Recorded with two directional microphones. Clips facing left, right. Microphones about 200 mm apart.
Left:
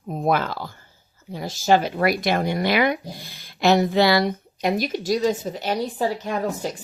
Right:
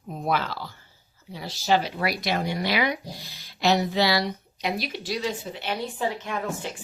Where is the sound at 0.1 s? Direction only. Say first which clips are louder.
Left 5 dB; 50° left (ahead or behind).